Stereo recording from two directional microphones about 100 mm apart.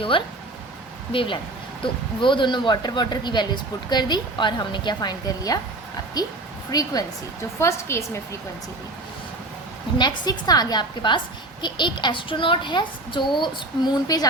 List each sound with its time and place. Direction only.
0.1 s speech: 60° left (ahead or behind); by 7.0 s 40° left (ahead or behind)
7.6 s a woman's voice: 30° left (ahead or behind)
10.0 s speech: 40° left (ahead or behind)